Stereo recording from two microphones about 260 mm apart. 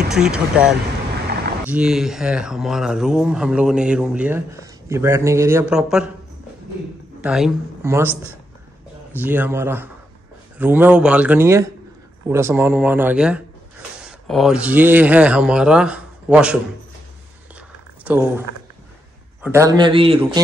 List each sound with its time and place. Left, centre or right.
0.1 s speech: centre
7.2 s speech: centre
9.2 s speech: centre
18.0 s speech: centre
19.4 s speech: centre